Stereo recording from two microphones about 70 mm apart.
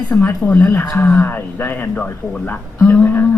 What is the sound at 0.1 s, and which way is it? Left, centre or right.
Speech, left.